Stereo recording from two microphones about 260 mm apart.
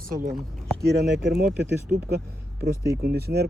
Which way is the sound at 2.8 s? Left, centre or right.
Right.